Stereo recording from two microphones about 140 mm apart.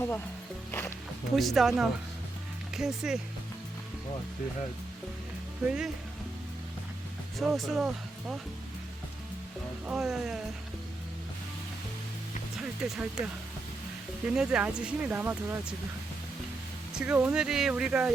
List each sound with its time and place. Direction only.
0.7 s speech: 15° left (ahead or behind)
1.4 s speech: centre (ahead or behind)
5.6 s speech: 5° right (ahead or behind)
7.3 s speech: centre (ahead or behind)
9.8 s speech: 5° right (ahead or behind)
12.5 s speech: 5° right (ahead or behind)
16.9 s speech: 10° right (ahead or behind)